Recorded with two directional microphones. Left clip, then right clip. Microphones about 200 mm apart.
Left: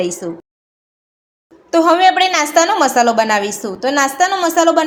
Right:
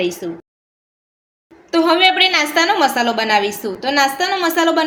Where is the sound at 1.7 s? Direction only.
35° left (ahead or behind).